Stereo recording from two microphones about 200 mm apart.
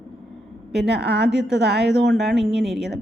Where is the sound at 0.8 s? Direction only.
55° right (ahead or behind).